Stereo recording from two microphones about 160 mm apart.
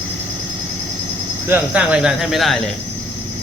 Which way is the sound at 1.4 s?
10° right (ahead or behind).